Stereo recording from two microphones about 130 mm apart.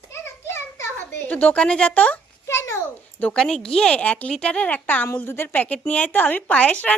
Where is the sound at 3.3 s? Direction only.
5° left (ahead or behind).